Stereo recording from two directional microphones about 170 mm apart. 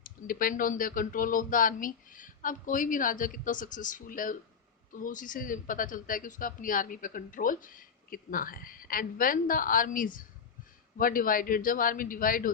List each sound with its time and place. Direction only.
0.0 s a man's voice: 55° left (ahead or behind)